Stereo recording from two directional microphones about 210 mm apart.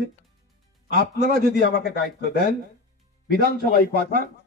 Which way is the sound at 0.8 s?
50° left (ahead or behind).